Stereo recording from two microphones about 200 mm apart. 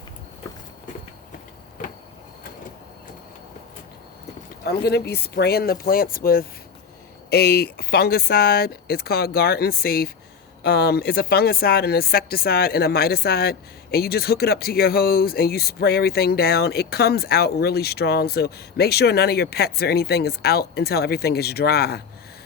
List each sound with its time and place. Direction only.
4.6 s speech: 55° left (ahead or behind)